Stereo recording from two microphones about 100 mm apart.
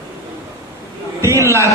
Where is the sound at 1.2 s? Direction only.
30° right (ahead or behind).